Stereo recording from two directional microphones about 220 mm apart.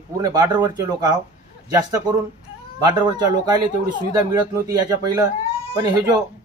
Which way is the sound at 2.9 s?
20° right (ahead or behind).